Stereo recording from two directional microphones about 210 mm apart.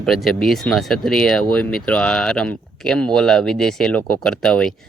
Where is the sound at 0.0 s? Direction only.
Centre (ahead or behind).